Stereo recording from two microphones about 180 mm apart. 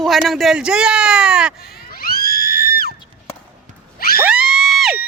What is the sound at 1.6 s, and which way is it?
Screaming, 55° left (ahead or behind).